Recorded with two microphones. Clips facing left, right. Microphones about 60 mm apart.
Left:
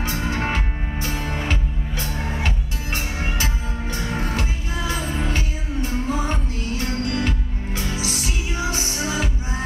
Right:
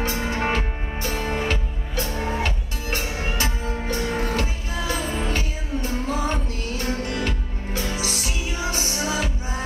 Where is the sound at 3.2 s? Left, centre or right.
Centre.